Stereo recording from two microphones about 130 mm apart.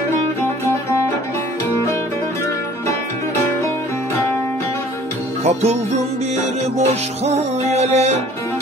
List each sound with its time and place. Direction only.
5.4 s music: 55° right (ahead or behind)
7.2 s music: 60° right (ahead or behind)